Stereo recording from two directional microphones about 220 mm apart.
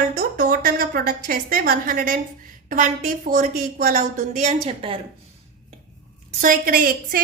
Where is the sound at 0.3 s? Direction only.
40° right (ahead or behind).